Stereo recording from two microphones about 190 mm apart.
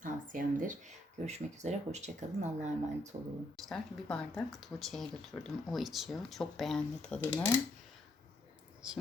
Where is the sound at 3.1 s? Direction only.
25° right (ahead or behind).